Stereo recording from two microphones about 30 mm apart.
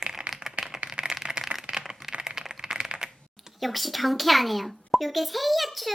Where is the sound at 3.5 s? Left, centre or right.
Centre.